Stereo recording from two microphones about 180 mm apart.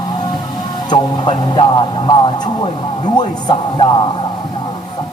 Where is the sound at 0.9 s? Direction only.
25° left (ahead or behind).